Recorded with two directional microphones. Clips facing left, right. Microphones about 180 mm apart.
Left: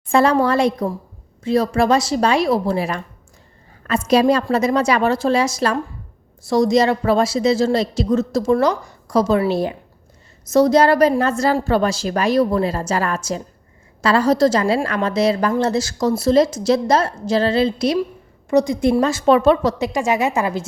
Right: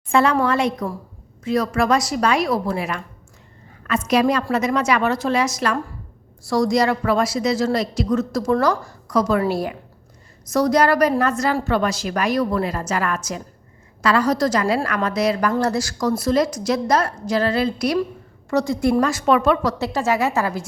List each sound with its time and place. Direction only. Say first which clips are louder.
0.1 s a woman's voice: left 3 dB; 35° left (ahead or behind)
19.8 s speech: left 2 dB; 15° left (ahead or behind)